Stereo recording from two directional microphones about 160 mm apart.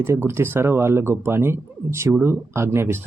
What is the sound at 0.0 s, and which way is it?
Speech, 15° right (ahead or behind).